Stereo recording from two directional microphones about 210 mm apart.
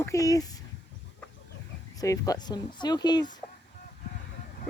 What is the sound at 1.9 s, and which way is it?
Speech, 15° left (ahead or behind).